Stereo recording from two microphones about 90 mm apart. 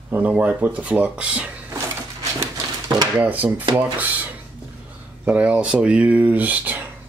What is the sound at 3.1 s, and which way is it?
Speech, 15° right (ahead or behind).